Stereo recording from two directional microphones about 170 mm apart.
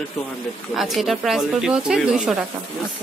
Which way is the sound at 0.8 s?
Centre (ahead or behind).